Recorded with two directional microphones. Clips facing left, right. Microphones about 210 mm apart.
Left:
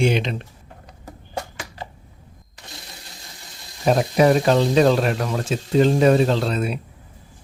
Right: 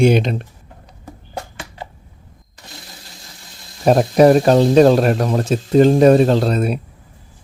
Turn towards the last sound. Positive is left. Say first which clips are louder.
# right 5 dB
turn(degrees=-40)  # may be behind; listen again after turning